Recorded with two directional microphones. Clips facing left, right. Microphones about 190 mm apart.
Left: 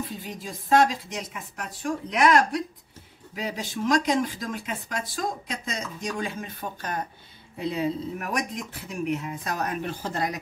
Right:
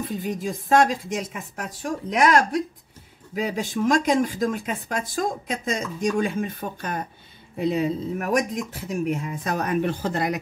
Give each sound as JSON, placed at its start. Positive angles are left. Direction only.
{"t": 0.0, "sound": "speech", "side_deg": -50}